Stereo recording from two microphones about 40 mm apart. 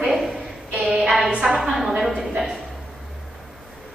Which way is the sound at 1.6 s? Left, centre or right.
Centre.